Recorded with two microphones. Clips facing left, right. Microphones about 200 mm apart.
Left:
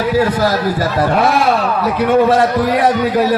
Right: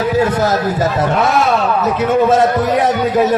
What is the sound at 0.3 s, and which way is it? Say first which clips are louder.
Speech: even; 25° right (ahead or behind).